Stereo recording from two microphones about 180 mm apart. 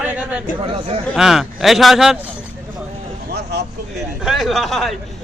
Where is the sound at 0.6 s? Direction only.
30° right (ahead or behind).